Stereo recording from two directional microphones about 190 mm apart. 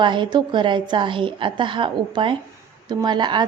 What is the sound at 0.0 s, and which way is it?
A woman's voice, 25° right (ahead or behind).